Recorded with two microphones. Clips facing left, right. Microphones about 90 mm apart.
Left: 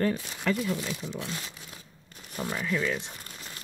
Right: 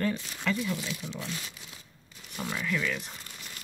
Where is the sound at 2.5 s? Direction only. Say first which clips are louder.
Left 2 dB; 25° left (ahead or behind).